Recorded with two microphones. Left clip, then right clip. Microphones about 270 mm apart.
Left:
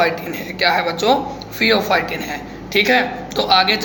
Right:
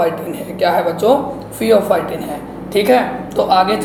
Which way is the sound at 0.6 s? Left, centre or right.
Centre.